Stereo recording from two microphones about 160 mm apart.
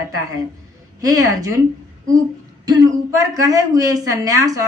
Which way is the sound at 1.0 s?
20° right (ahead or behind).